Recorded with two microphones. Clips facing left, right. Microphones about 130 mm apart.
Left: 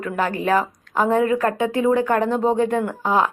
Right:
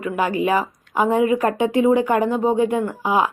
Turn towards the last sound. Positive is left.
turn(degrees=-10)  # may be behind; listen again after turning